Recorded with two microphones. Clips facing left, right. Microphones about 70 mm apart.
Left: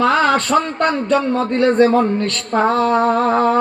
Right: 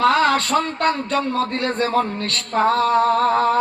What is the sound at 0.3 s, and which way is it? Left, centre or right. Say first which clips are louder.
Speech: left 3 dB; left.